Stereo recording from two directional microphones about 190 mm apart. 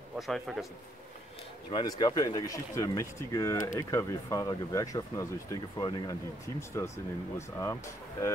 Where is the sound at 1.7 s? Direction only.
25° left (ahead or behind).